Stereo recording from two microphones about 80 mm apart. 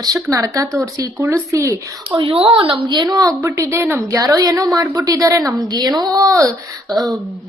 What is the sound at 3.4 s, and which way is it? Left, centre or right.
A woman's voice, right.